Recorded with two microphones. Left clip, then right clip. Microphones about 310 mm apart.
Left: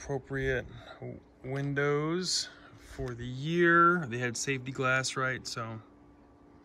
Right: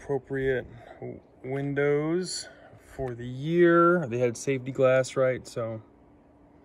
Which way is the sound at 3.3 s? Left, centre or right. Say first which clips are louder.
Right 3 dB; left.